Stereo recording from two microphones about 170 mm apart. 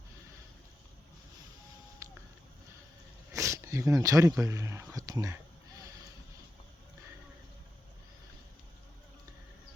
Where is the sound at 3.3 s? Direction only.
15° right (ahead or behind).